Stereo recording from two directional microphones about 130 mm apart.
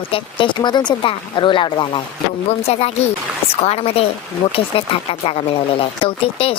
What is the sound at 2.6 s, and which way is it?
A woman's voice, 50° left (ahead or behind).